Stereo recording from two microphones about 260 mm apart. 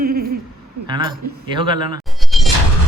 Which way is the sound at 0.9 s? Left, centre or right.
Centre.